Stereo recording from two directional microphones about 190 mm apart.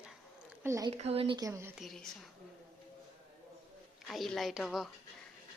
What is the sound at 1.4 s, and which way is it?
Speech, 15° right (ahead or behind).